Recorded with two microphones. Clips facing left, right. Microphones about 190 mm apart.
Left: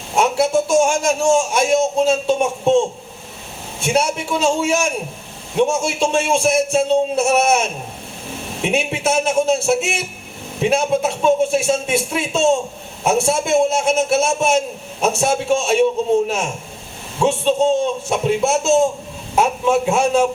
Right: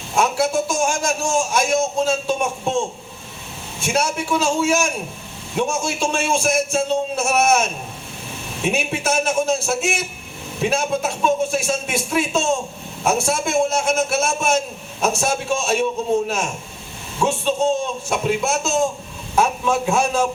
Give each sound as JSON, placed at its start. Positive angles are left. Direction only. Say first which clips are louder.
{"t": 0.2, "sound": "a sound", "louder": "left 3 dB", "side_deg": 20}
{"t": 3.8, "sound": "a man's voice", "louder": "left 2 dB", "side_deg": 25}
{"t": 8.7, "sound": "a man's voice", "louder": "left 4 dB", "side_deg": 25}
{"t": 17.2, "sound": "a man's voice", "louder": "left 4 dB", "side_deg": 20}